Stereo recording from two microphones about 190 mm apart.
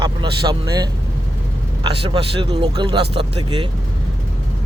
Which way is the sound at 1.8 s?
30° right (ahead or behind).